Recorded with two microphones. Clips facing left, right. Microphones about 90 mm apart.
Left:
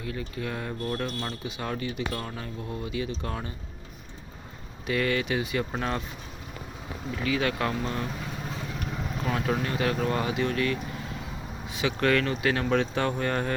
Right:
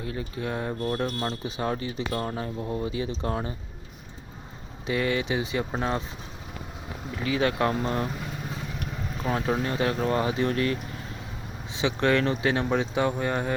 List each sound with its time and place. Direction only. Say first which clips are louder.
0.0 s speech: right 2 dB; 30° right (ahead or behind)
4.9 s speech: right 1 dB; 20° right (ahead or behind)
7.2 s speech: right 3 dB; 30° right (ahead or behind)
9.2 s speech: right 2 dB; 25° right (ahead or behind)